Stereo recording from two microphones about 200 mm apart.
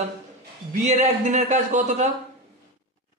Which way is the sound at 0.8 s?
35° right (ahead or behind).